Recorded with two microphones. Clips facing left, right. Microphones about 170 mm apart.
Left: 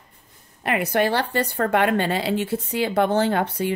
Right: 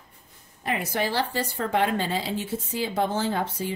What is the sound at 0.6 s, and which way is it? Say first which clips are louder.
Speech: left 6 dB; 65° left (ahead or behind).